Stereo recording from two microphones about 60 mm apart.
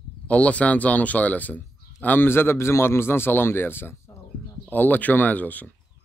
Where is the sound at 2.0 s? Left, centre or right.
Left.